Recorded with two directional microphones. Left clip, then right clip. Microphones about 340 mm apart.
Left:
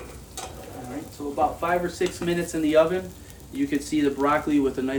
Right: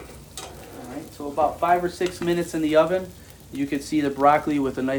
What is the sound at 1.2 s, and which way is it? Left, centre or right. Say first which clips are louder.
Speech: right 2 dB; centre.